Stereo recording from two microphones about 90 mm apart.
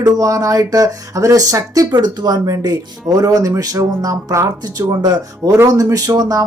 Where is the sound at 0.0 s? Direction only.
40° right (ahead or behind).